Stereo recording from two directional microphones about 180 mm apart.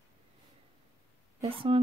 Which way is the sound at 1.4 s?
30° right (ahead or behind).